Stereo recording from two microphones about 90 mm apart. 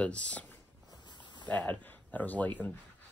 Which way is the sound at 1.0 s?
55° left (ahead or behind).